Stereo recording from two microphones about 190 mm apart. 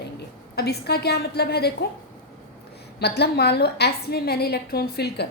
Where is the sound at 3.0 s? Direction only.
60° left (ahead or behind).